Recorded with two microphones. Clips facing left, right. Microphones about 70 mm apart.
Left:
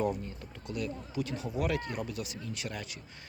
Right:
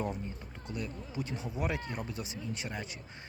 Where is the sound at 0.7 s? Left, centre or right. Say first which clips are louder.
Left 3 dB; right.